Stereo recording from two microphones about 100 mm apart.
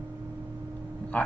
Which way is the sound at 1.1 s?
15° left (ahead or behind).